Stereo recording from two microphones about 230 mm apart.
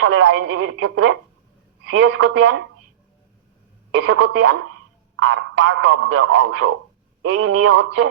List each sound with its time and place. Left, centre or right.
0.0 s a man's voice: right
3.9 s a man's voice: right